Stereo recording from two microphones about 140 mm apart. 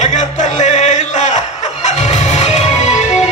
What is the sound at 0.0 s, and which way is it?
Music, 60° left (ahead or behind).